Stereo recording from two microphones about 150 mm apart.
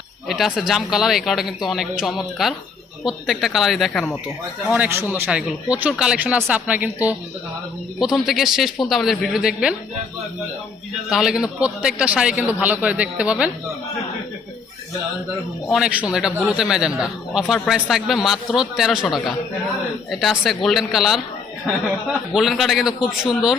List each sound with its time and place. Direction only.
0.3 s a man's voice: centre (ahead or behind)
4.7 s a man's voice: 15° right (ahead or behind)
11.1 s a man's voice: 5° right (ahead or behind)
15.7 s a man's voice: 5° right (ahead or behind)
20.4 s a man's voice: centre (ahead or behind)
22.3 s a man's voice: centre (ahead or behind)